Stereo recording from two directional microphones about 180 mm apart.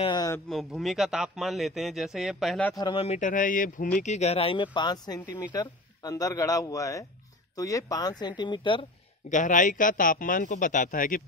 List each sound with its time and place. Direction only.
0.0 s speech: 25° left (ahead or behind)
0.5 s a man's voice: centre (ahead or behind)
2.8 s a man's voice: 30° left (ahead or behind)
9.3 s a man's voice: 45° left (ahead or behind)